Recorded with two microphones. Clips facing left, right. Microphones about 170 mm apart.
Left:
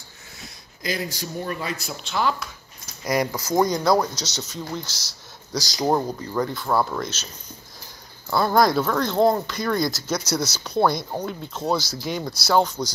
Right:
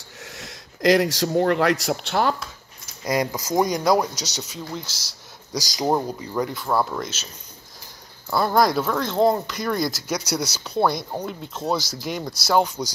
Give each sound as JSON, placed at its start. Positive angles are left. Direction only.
{"t": 0.4, "sound": "a man's voice", "side_deg": -85}
{"t": 3.0, "sound": "speech", "side_deg": -20}
{"t": 5.9, "sound": "speech", "side_deg": -5}
{"t": 8.3, "sound": "speech", "side_deg": -5}